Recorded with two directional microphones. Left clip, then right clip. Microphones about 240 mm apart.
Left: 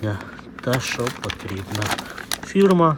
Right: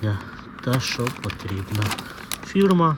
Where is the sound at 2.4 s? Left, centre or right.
Centre.